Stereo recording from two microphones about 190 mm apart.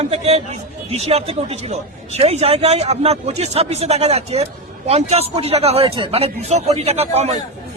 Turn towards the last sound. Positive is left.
turn(degrees=-35)  # may be behind; listen again after turning